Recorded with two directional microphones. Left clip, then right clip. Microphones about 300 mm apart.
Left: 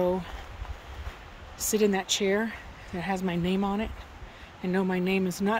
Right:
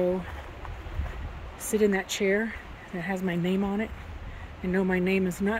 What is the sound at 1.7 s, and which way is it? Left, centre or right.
Speech, centre.